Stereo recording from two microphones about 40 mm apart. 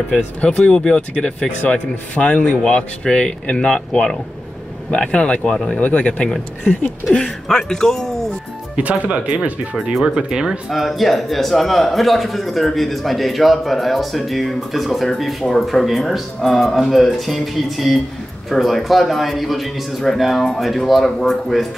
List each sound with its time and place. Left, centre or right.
0.1 s speech: left
5.8 s speech: left
7.2 s speech: centre
8.7 s speech: right
10.0 s speech: centre
10.7 s a man's voice: centre